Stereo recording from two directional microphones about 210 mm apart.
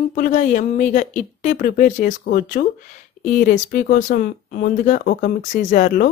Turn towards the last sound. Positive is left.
turn(degrees=40)  # may be behind; listen again after turning